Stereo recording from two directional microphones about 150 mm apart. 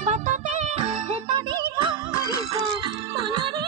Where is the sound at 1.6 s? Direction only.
30° right (ahead or behind).